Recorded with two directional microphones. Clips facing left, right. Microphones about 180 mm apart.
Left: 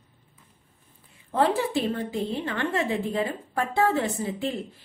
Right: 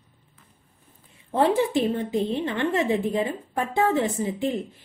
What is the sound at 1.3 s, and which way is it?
A woman's voice, 20° right (ahead or behind).